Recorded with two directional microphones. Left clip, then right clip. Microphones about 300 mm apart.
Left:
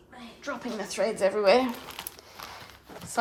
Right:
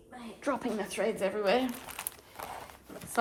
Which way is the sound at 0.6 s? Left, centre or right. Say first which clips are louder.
Left 3 dB; centre.